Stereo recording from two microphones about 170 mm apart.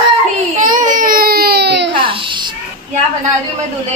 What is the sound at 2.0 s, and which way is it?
Babbling, 30° right (ahead or behind).